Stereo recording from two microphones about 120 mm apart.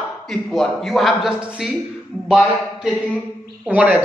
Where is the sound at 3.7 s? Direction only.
10° right (ahead or behind).